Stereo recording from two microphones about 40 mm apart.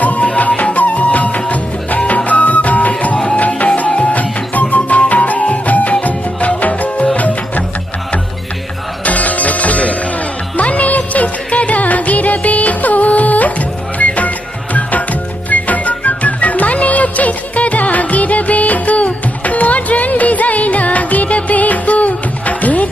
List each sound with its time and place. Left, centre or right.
0.0 s music: left
9.0 s music: left